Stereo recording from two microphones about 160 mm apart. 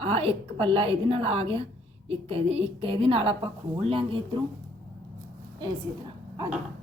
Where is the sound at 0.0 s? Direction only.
35° right (ahead or behind).